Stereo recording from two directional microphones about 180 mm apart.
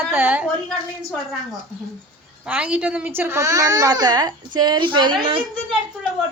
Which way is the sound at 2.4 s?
5° right (ahead or behind).